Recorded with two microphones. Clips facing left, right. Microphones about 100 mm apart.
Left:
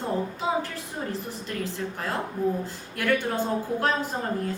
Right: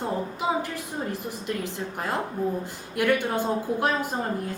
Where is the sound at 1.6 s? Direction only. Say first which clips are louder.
Even; 15° right (ahead or behind).